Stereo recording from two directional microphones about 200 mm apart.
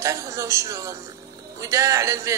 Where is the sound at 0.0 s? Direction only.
15° right (ahead or behind).